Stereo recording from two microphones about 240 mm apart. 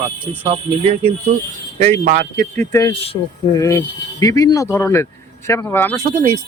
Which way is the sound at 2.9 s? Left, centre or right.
Left.